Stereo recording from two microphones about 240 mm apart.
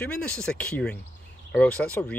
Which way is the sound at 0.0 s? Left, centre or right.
Centre.